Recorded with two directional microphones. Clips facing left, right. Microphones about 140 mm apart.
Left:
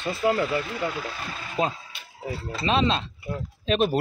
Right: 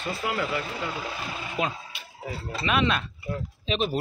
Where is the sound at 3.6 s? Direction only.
50° left (ahead or behind).